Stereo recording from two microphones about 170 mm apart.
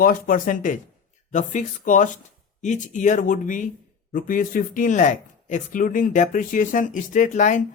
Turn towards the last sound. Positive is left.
turn(degrees=45)  # may be behind; listen again after turning